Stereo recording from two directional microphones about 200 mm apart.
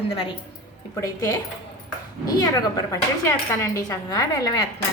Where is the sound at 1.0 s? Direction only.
15° left (ahead or behind).